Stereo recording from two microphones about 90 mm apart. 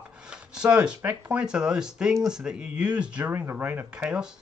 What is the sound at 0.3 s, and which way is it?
Speech, 10° right (ahead or behind).